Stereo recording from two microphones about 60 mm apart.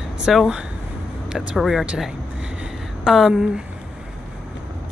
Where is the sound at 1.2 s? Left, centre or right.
Centre.